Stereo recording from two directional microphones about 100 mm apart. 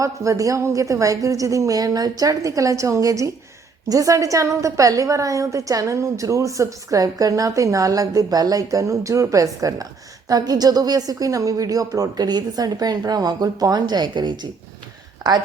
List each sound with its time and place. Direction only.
0.0 s a woman's voice: 35° right (ahead or behind)